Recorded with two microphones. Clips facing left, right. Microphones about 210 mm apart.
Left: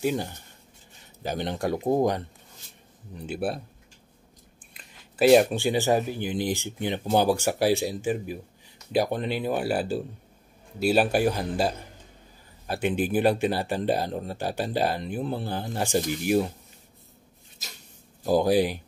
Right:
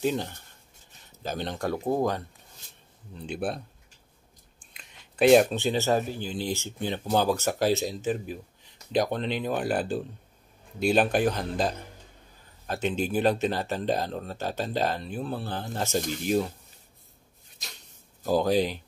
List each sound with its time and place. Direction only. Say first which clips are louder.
0.0 s speech: left 1 dB; 10° left (ahead or behind)
3.2 s speech: left 2 dB; 5° left (ahead or behind)
4.7 s speech: even; 5° left (ahead or behind)
18.2 s speech: left 2 dB; 10° left (ahead or behind)